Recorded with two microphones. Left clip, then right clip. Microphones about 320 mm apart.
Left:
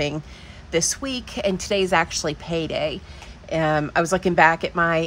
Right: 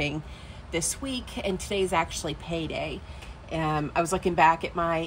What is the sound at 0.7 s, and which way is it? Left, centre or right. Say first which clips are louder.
A woman's voice: left 8 dB; left.